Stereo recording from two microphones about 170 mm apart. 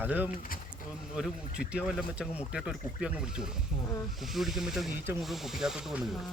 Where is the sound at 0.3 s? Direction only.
55° left (ahead or behind).